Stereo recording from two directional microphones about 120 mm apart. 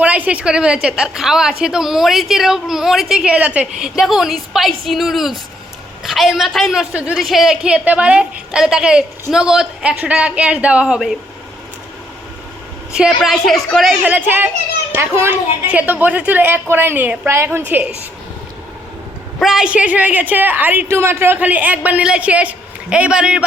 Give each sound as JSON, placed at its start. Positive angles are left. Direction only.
{"t": 0.0, "sound": "a woman's voice", "side_deg": -10}
{"t": 12.9, "sound": "a woman's voice", "side_deg": -5}
{"t": 13.9, "sound": "a woman's voice", "side_deg": -15}
{"t": 19.4, "sound": "a woman's voice", "side_deg": -5}